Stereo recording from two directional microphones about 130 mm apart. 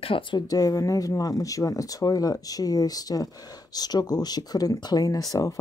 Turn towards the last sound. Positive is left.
turn(degrees=25)  # may be behind; listen again after turning